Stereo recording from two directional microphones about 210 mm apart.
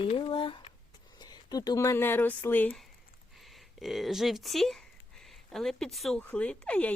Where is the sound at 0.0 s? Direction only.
25° left (ahead or behind).